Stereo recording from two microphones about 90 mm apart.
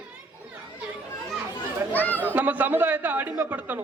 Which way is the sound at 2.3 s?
20° right (ahead or behind).